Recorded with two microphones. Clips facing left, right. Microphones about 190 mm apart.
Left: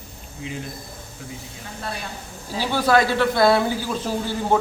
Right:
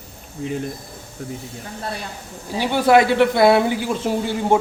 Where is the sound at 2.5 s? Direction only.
20° right (ahead or behind).